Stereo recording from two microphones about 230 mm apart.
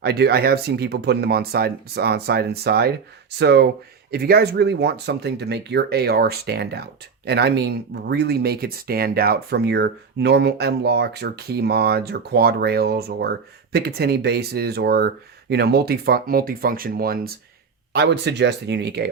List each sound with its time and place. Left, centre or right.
0.0 s speech: right